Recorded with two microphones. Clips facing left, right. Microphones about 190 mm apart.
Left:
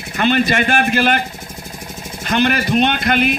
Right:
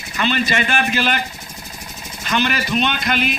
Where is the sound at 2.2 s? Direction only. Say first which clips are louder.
Left 4 dB; 55° left (ahead or behind).